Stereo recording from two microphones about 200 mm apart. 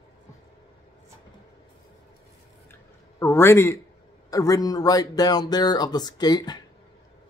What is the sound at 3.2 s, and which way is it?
Speech, 10° left (ahead or behind).